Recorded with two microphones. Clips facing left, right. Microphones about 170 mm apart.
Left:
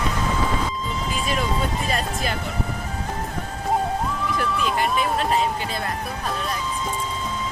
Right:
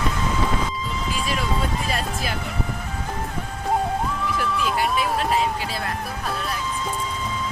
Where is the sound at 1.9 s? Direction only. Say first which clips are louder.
Left 1 dB; centre (ahead or behind).